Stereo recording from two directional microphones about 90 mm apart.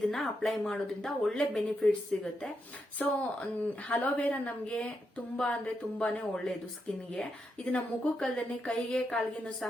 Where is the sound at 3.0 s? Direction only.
10° left (ahead or behind).